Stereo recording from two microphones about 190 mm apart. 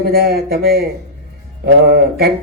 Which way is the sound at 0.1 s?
55° right (ahead or behind).